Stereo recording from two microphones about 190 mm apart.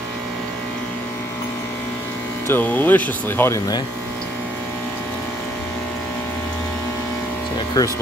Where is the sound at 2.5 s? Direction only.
10° left (ahead or behind).